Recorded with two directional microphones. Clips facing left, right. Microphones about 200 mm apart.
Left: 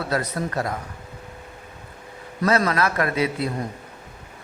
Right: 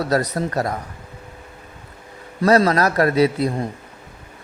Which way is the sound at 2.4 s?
35° right (ahead or behind).